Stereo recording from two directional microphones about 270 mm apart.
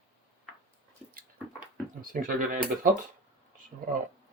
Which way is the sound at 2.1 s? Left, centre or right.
Right.